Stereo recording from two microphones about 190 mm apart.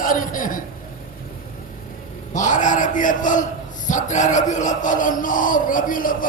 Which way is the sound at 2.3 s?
40° left (ahead or behind).